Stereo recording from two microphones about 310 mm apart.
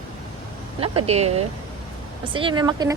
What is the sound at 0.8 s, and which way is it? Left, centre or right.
A woman's voice, centre.